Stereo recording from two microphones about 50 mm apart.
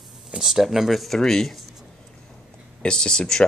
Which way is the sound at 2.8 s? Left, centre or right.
Centre.